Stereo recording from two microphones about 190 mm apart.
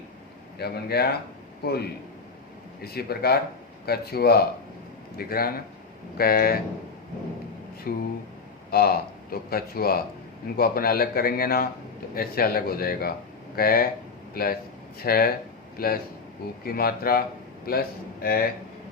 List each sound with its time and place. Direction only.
0.6 s speech: 55° left (ahead or behind)
7.9 s speech: 50° left (ahead or behind)